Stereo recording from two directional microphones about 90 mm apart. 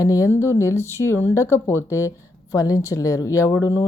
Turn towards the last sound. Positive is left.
turn(degrees=35)  # may be behind; listen again after turning